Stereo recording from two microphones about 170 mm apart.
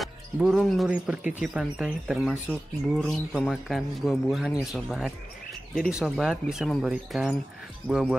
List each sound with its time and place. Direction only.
0.0 s speech: centre (ahead or behind)